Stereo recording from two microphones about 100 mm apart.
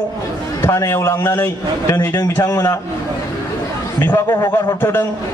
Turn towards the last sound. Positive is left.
turn(degrees=20)  # may be behind; listen again after turning